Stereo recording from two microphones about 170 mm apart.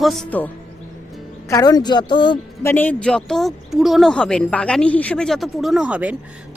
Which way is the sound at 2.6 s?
10° left (ahead or behind).